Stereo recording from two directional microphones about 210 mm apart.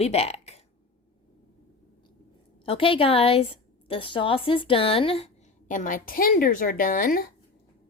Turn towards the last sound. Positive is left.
turn(degrees=40)  # may be behind; listen again after turning